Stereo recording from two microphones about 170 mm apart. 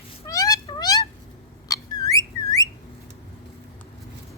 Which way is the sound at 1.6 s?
20° left (ahead or behind).